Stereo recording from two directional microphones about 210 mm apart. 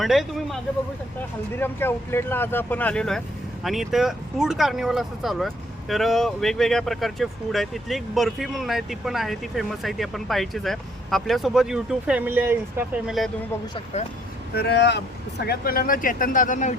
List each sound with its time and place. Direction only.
0.0 s speech: centre (ahead or behind)
1.5 s speech: 10° left (ahead or behind); by 13.1 s 10° right (ahead or behind)
14.5 s speech: 50° left (ahead or behind)
15.4 s speech: 45° left (ahead or behind)